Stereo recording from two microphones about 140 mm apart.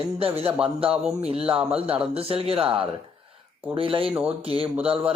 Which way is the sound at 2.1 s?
45° right (ahead or behind).